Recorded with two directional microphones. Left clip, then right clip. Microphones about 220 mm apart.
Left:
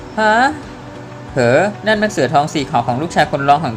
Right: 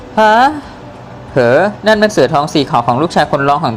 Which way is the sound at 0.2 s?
15° right (ahead or behind).